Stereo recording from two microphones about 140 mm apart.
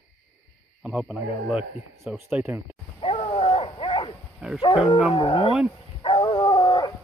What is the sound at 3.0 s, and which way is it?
Dog, 40° left (ahead or behind).